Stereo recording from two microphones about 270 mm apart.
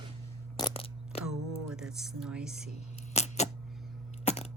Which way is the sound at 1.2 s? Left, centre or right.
Centre.